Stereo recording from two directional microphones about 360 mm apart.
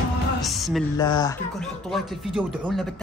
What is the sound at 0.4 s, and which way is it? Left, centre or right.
Music, centre.